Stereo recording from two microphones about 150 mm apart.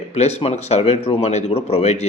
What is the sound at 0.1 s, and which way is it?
Speech, 45° left (ahead or behind).